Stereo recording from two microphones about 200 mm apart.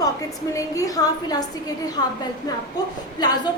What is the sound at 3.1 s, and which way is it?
Speech, 20° left (ahead or behind).